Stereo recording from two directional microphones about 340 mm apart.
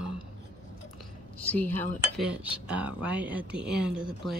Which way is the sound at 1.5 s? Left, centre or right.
Centre.